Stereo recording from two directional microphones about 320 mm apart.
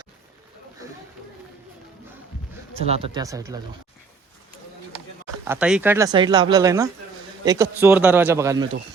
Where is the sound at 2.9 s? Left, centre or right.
Centre.